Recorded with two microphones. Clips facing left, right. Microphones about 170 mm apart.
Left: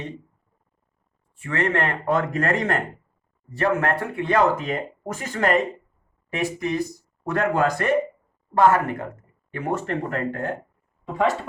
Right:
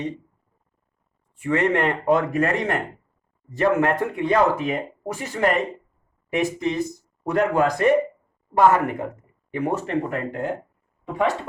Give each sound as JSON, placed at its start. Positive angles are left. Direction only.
{"t": 1.4, "sound": "speech", "side_deg": -20}
{"t": 6.3, "sound": "speech", "side_deg": -20}